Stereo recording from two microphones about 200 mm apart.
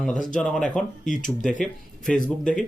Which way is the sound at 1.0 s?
40° left (ahead or behind).